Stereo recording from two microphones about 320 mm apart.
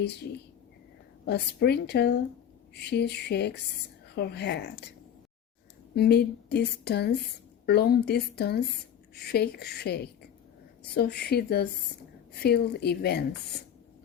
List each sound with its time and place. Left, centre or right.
1.3 s speech: left
5.9 s speech: left